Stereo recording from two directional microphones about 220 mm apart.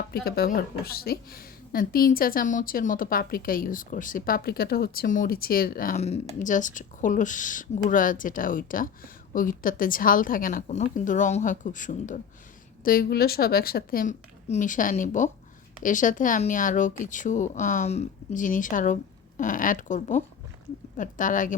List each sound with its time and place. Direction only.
0.1 s speech: 45° left (ahead or behind)